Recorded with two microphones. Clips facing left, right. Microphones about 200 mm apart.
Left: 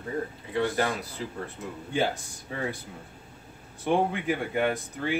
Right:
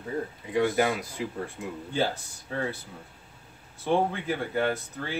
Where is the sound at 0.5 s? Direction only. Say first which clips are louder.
Right 3 dB; 15° right (ahead or behind).